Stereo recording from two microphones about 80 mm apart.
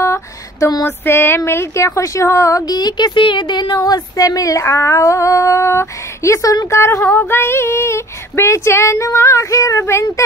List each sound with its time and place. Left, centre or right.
0.0 s a sound: left
0.8 s female singing: left
2.6 s speech: left
6.7 s female singing: left